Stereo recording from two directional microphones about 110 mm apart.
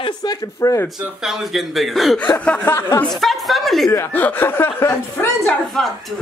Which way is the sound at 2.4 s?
15° left (ahead or behind).